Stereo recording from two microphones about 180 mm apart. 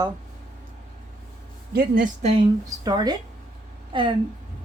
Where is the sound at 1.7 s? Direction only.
55° right (ahead or behind).